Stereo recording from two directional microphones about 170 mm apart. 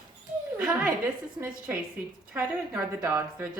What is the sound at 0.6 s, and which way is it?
A woman's voice, 5° right (ahead or behind).